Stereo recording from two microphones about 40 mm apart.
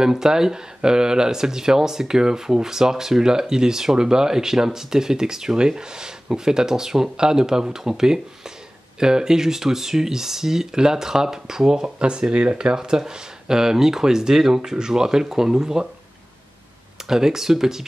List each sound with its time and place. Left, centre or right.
0.0 s speech: centre
17.1 s speech: centre